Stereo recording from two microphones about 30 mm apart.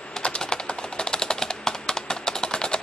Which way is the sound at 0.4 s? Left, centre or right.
Left.